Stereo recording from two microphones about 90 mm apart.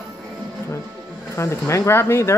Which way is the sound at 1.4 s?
30° left (ahead or behind).